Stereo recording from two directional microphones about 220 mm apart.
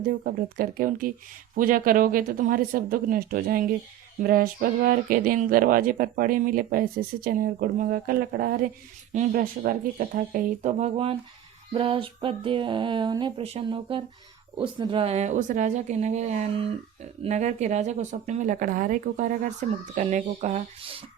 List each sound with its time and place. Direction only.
0.0 s speech: 40° right (ahead or behind)
11.7 s a sound: 25° right (ahead or behind)
14.8 s speech: 20° right (ahead or behind)